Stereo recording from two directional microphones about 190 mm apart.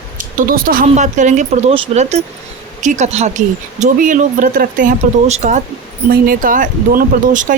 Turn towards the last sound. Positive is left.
turn(degrees=-40)  # may be behind; listen again after turning